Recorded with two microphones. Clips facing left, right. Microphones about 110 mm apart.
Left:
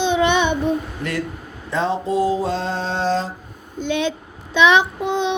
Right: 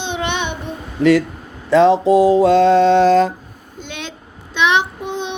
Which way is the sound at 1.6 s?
80° right.